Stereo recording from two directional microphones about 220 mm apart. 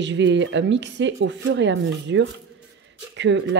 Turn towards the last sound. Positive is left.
turn(degrees=-55)  # may be behind; listen again after turning